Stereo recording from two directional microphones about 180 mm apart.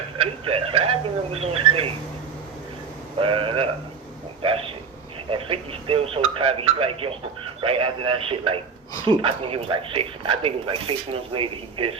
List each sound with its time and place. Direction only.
0.2 s speech: 30° right (ahead or behind)
3.2 s speech: 30° right (ahead or behind)